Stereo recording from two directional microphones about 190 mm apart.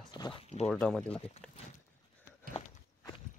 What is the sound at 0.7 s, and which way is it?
Speech, 5° left (ahead or behind).